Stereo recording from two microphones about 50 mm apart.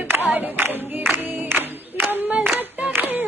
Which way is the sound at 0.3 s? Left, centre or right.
Right.